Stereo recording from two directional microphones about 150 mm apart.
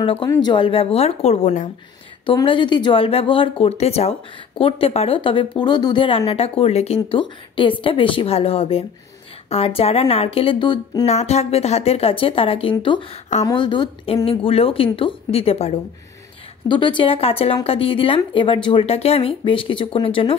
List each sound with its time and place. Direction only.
0.0 s speech: 40° left (ahead or behind)
0.3 s speech: 30° left (ahead or behind); by 1.7 s 50° left (ahead or behind)
2.2 s speech: 35° left (ahead or behind)
11.1 s speech: 45° left (ahead or behind)